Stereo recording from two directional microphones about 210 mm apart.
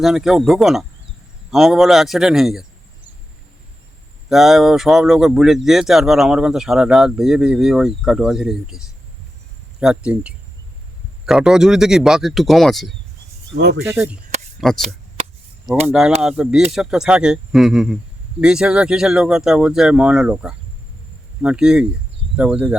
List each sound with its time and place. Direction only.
0.0 s speech: centre (ahead or behind)
4.3 s speech: centre (ahead or behind)
9.8 s speech: 5° right (ahead or behind)
13.6 s speech: 55° right (ahead or behind)
13.8 s speech: 10° right (ahead or behind)
15.9 s speech: 5° right (ahead or behind)